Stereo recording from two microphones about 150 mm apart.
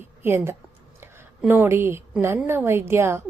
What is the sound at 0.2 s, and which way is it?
A woman's voice, 15° right (ahead or behind).